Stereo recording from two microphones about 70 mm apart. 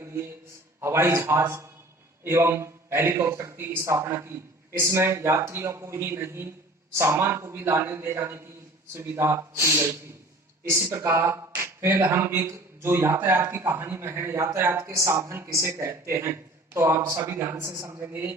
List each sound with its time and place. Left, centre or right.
0.0 s a sound: right
0.8 s speech: right
17.7 s a woman's voice: right
18.0 s speech: right